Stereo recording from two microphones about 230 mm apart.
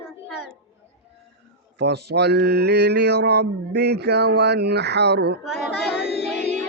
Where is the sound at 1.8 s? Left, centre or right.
Right.